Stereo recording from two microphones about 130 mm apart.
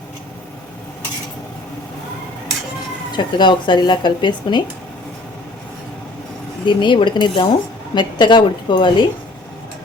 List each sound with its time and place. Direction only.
3.1 s speech: 35° left (ahead or behind)
6.7 s speech: 35° left (ahead or behind)